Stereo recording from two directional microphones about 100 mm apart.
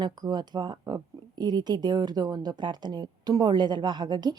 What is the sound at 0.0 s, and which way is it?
Speech, 45° right (ahead or behind).